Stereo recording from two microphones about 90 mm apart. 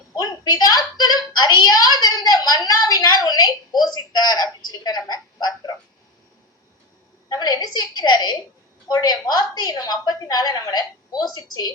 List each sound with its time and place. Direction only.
0.2 s a woman's voice: 50° left (ahead or behind)
7.3 s a woman's voice: 45° left (ahead or behind)